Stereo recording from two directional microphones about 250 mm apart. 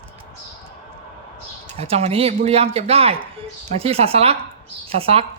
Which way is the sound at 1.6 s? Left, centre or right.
Right.